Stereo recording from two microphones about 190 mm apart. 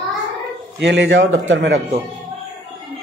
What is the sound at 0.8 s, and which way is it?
A man's voice, 70° right (ahead or behind).